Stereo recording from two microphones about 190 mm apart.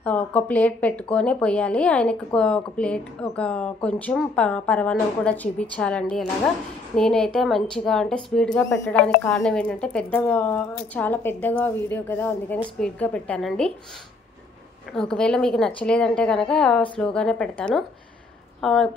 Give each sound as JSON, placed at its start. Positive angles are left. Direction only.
{"t": 0.0, "sound": "a woman's voice", "side_deg": 10}
{"t": 15.0, "sound": "a woman's voice", "side_deg": 5}